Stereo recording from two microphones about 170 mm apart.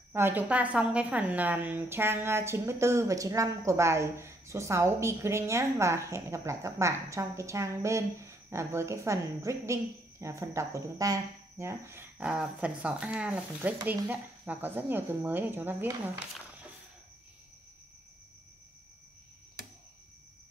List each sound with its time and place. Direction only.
0.1 s a woman's voice: 10° right (ahead or behind)